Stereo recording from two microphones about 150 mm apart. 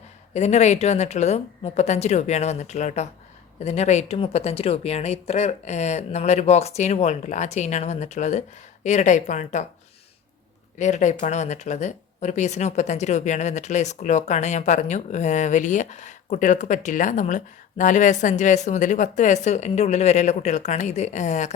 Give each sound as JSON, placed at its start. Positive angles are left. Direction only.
{"t": 0.3, "sound": "speech", "side_deg": 50}
{"t": 10.8, "sound": "speech", "side_deg": 55}